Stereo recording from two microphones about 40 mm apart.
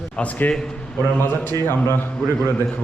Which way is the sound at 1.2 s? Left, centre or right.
Left.